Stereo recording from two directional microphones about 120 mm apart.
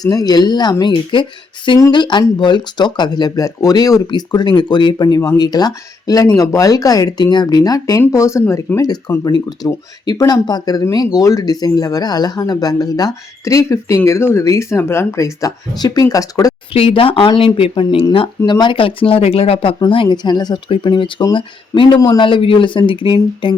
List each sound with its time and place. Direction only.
0.0 s speech: 30° left (ahead or behind)
16.7 s speech: 50° left (ahead or behind)
19.9 s speech: 40° left (ahead or behind)